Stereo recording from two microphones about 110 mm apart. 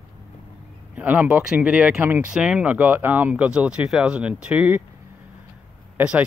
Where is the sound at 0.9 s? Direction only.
15° right (ahead or behind).